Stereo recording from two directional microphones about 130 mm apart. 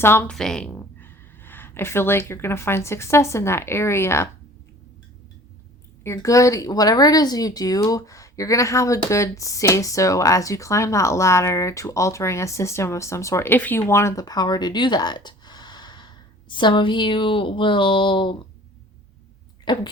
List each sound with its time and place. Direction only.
0.0 s speech: 15° left (ahead or behind)
0.3 s speech: 5° left (ahead or behind); by 4.3 s 20° left (ahead or behind)
6.0 s speech: 25° left (ahead or behind); by 18.3 s 40° left (ahead or behind)
19.6 s speech: 35° left (ahead or behind)